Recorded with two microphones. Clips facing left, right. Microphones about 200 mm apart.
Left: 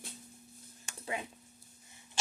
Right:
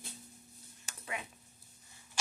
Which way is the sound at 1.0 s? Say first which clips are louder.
Left 4 dB; 25° left (ahead or behind).